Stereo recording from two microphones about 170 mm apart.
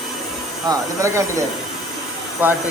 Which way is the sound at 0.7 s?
15° right (ahead or behind).